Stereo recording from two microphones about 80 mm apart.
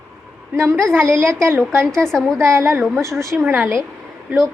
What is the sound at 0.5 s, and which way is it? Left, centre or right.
A woman's voice, right.